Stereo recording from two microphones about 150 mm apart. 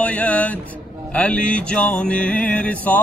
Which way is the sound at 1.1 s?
5° left (ahead or behind).